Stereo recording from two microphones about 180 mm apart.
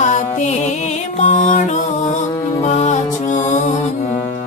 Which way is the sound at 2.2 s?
15° left (ahead or behind).